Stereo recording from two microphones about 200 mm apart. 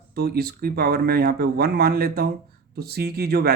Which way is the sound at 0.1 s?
50° right (ahead or behind).